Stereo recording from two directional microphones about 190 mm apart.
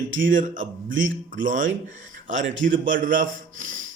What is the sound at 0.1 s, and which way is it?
Speech, 80° right.